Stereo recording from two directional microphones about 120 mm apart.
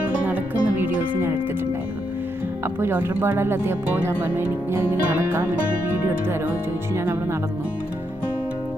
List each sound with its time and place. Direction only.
0.3 s music: 15° right (ahead or behind)
2.6 s speech: 20° right (ahead or behind)
6.9 s speech: 20° right (ahead or behind)